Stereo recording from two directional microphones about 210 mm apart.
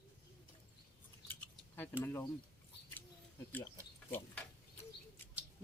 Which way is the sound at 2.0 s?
10° left (ahead or behind).